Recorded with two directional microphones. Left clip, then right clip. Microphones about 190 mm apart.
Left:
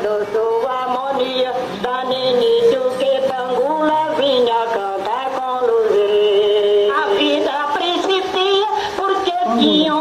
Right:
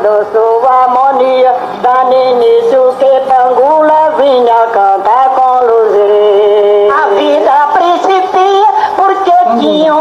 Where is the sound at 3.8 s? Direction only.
20° left (ahead or behind).